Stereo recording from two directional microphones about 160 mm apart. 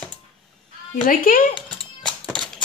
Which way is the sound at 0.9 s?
60° left (ahead or behind).